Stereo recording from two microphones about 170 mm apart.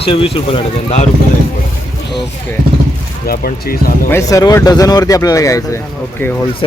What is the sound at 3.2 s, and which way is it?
Speech, 60° left (ahead or behind).